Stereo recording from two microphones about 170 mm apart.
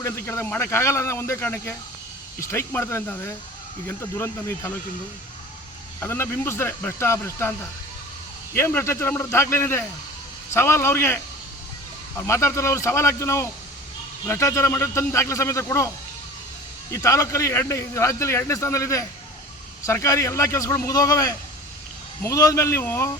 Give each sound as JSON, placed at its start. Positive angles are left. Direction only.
{"t": 0.0, "sound": "a man's voice", "side_deg": 15}
{"t": 6.0, "sound": "a man's voice", "side_deg": 15}
{"t": 16.9, "sound": "a man's voice", "side_deg": 20}